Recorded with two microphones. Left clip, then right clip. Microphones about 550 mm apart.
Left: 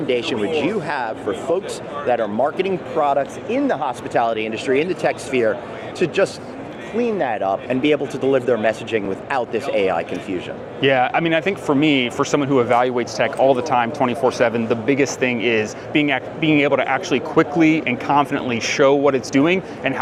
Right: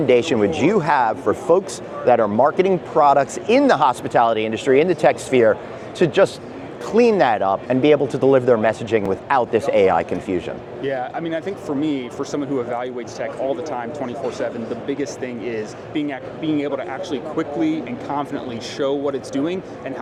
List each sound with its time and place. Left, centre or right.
0.1 s speech: right
10.8 s speech: left